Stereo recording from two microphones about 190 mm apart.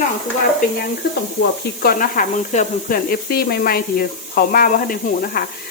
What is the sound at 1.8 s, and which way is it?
Speech, 45° left (ahead or behind).